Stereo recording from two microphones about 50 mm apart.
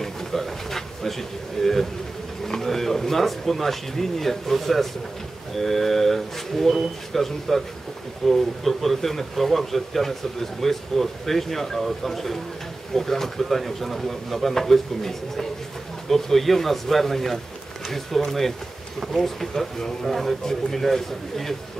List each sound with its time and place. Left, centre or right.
0.0 s a man's voice: centre